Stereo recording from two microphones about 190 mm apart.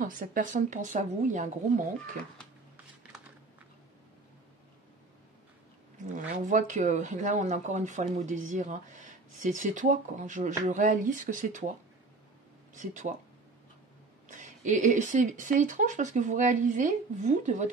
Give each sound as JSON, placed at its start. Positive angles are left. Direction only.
{"t": 0.0, "sound": "a woman's voice", "side_deg": -45}
{"t": 6.1, "sound": "speech", "side_deg": -40}
{"t": 12.7, "sound": "speech", "side_deg": -40}
{"t": 14.2, "sound": "speech", "side_deg": -40}